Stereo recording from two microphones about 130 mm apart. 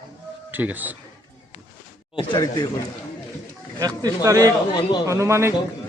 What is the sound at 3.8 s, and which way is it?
Speech, 25° right (ahead or behind).